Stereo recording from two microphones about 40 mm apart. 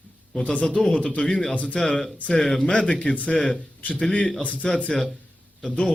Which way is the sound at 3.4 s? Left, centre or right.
Centre.